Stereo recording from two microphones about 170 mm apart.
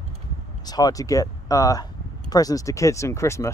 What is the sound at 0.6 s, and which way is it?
Speech, 20° left (ahead or behind).